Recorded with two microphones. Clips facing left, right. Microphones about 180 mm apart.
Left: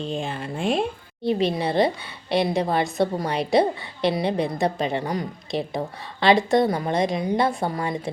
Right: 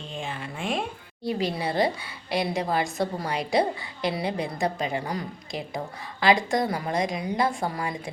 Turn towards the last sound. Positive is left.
turn(degrees=25)  # may be behind; listen again after turning